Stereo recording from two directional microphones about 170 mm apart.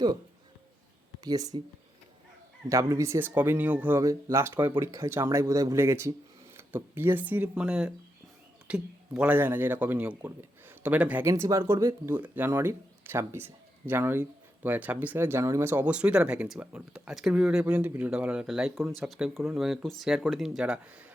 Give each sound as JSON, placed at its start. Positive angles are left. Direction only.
{"t": 1.2, "sound": "speech", "side_deg": -20}
{"t": 2.6, "sound": "a man's voice", "side_deg": -20}